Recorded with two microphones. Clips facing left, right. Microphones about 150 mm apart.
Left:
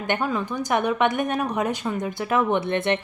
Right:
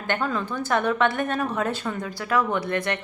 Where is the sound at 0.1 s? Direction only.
15° left (ahead or behind).